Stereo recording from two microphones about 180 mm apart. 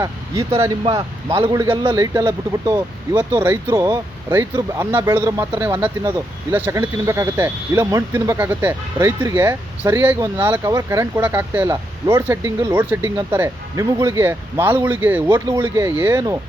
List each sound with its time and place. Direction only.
0.6 s speech: 25° right (ahead or behind)